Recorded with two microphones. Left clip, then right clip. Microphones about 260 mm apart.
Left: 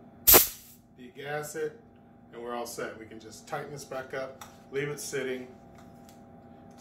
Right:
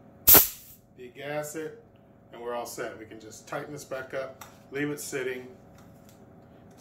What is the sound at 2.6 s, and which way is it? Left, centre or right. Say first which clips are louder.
Speech: right 1 dB; centre.